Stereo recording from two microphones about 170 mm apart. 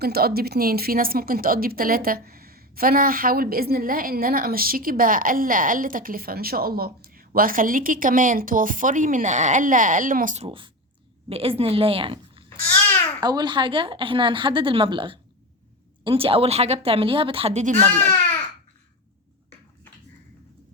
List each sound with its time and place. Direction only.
0.0 s a woman's voice: 65° right (ahead or behind); by 12.5 s 30° right (ahead or behind)
12.6 s babbling: 15° left (ahead or behind)
13.2 s speech: 25° right (ahead or behind); by 18.1 s 50° right (ahead or behind)